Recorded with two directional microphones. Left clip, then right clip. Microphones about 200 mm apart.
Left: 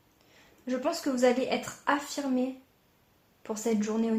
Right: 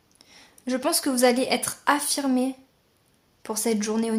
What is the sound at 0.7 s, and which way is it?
Speech, 35° right (ahead or behind).